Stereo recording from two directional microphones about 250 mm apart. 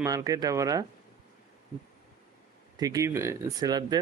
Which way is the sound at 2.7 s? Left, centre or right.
Centre.